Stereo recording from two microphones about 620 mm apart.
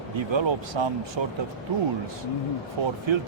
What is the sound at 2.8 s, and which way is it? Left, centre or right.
Speech, right.